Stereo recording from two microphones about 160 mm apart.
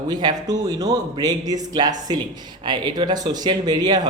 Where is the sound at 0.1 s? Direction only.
25° right (ahead or behind).